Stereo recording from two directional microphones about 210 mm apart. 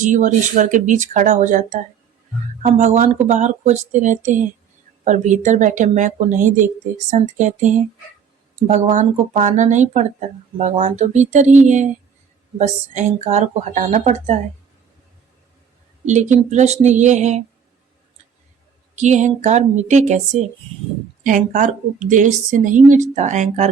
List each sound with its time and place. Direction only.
0.0 s speech: 35° right (ahead or behind)
16.0 s speech: 35° right (ahead or behind)
18.9 s speech: 35° right (ahead or behind)
21.2 s speech: 35° right (ahead or behind)